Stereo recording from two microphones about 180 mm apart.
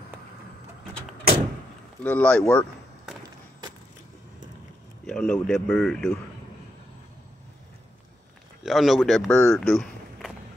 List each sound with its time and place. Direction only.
2.0 s speech: 10° left (ahead or behind)
5.0 s speech: 5° left (ahead or behind)
8.6 s speech: centre (ahead or behind)
9.6 s a sound: centre (ahead or behind)